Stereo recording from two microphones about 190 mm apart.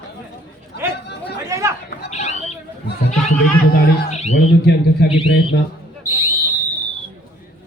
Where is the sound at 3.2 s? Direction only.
55° left (ahead or behind).